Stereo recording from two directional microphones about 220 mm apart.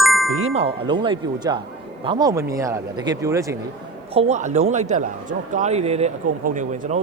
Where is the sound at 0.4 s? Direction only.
25° right (ahead or behind).